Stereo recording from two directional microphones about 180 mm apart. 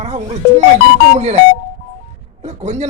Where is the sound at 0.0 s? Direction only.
35° right (ahead or behind).